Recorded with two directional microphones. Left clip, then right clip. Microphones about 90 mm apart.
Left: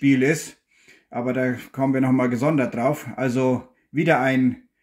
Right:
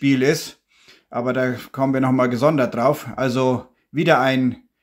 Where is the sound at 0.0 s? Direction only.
20° right (ahead or behind).